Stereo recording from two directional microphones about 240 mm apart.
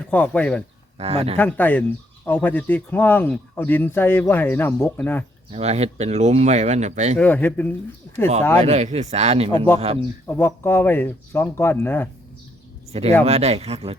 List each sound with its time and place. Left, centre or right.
0.1 s speech: centre
0.9 s speech: right
1.4 s speech: centre
5.5 s speech: right
7.2 s speech: centre
8.6 s speech: right
10.2 s speech: centre
12.9 s speech: right